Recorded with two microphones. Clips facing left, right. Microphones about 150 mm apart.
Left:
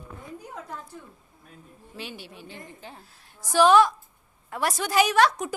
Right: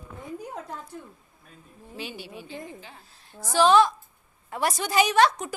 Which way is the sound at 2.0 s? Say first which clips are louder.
Right 2 dB; centre (ahead or behind).